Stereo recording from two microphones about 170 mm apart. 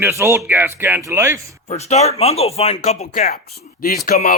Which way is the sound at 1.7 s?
40° left (ahead or behind).